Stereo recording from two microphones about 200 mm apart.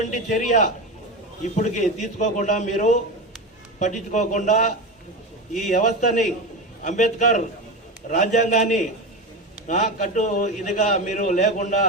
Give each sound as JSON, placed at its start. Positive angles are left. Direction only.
{"t": 0.0, "sound": "a man's voice", "side_deg": 40}